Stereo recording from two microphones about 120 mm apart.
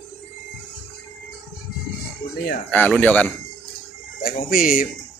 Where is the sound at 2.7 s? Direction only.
10° left (ahead or behind).